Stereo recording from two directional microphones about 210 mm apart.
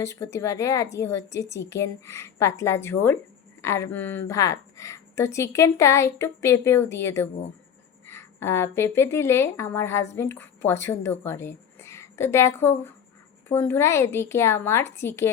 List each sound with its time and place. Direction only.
0.0 s a woman's voice: 15° left (ahead or behind)